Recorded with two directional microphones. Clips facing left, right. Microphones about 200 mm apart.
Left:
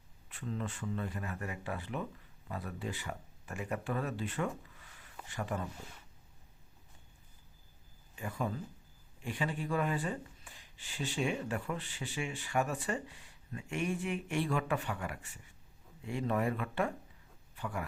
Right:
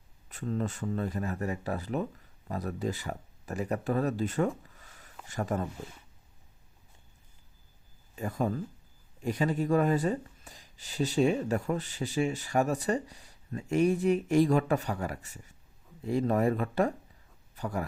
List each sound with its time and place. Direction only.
0.3 s speech: 40° right (ahead or behind)
8.1 s speech: 40° right (ahead or behind)